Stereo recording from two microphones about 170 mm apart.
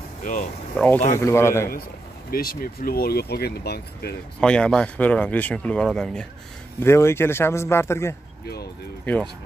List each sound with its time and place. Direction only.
0.2 s speech: 50° left (ahead or behind)
0.7 s a man's voice: 10° left (ahead or behind)
2.3 s speech: 60° left (ahead or behind)
4.4 s speech: 5° left (ahead or behind)
6.8 s a man's voice: 15° left (ahead or behind)